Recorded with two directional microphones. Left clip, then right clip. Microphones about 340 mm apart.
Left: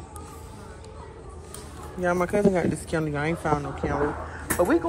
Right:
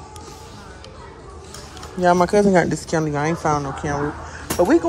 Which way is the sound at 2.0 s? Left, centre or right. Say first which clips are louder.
Right 8 dB; centre.